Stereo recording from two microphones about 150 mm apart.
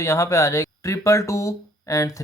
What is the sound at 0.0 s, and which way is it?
Speech, 20° left (ahead or behind).